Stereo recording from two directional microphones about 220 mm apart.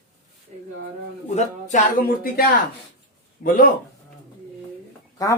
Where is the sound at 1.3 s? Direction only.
35° left (ahead or behind).